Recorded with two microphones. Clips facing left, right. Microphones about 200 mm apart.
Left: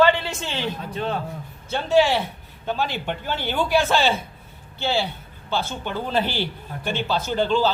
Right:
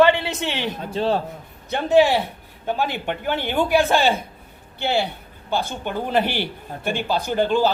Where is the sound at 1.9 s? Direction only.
15° right (ahead or behind).